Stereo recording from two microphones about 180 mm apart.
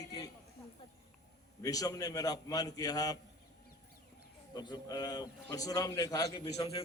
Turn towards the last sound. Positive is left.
turn(degrees=20)  # may be behind; listen again after turning